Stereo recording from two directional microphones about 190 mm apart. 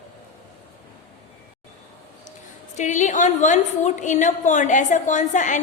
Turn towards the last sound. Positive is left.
turn(degrees=40)  # may be behind; listen again after turning